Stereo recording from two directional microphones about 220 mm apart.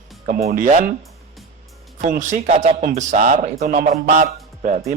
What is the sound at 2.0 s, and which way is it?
Speech, 35° right (ahead or behind).